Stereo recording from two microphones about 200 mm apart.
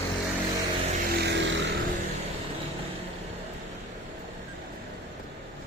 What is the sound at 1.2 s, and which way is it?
Vehicle, 60° right (ahead or behind).